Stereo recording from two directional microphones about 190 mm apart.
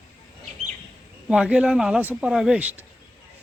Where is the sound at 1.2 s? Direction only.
5° right (ahead or behind).